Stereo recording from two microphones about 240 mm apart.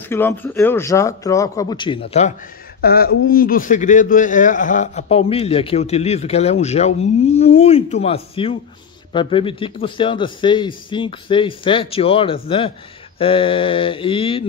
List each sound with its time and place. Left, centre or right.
0.1 s speech: centre; by 2.3 s left
2.8 s a man's voice: left